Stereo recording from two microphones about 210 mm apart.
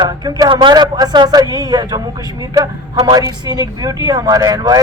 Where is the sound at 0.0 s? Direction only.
20° right (ahead or behind).